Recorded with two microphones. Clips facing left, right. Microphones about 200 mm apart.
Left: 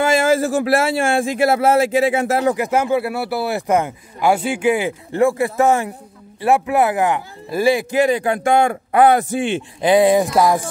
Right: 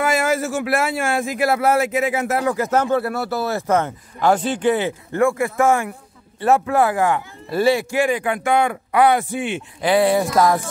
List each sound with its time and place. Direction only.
0.0 s speech: 30° left (ahead or behind)
8.0 s a man's voice: 40° left (ahead or behind)
9.4 s a man's voice: 30° left (ahead or behind)
9.8 s speech: 20° left (ahead or behind)